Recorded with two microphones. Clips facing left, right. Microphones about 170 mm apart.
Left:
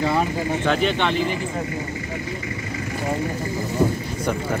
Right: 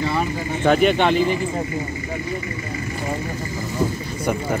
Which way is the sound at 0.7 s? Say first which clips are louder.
Right 7 dB; 45° right (ahead or behind).